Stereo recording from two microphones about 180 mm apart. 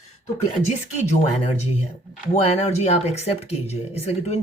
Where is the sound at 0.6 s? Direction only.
40° left (ahead or behind).